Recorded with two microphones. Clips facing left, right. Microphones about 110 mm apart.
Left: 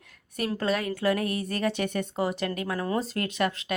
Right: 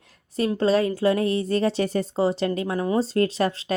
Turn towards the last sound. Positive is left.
turn(degrees=-30)  # may be behind; listen again after turning